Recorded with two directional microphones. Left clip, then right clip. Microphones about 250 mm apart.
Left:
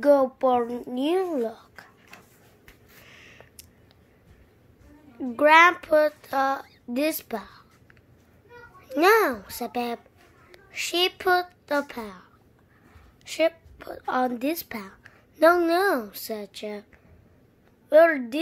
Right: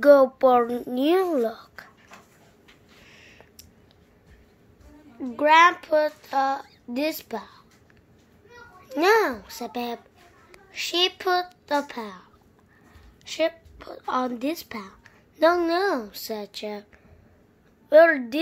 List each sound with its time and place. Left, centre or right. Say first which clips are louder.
0.0 s a child's voice: right 4 dB; centre
3.1 s a sound: left 2 dB; centre
5.2 s speech: even; centre
8.8 s a child's voice: left 1 dB; centre
17.8 s a child's voice: right 2 dB; centre